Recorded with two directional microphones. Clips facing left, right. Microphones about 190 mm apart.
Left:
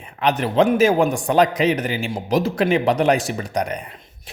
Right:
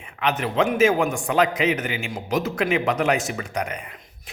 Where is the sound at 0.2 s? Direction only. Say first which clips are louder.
Left 5 dB; 35° left (ahead or behind).